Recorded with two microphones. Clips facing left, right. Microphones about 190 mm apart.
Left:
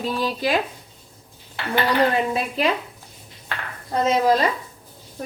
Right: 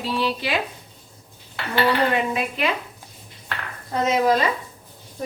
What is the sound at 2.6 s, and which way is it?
Speech, 35° left (ahead or behind).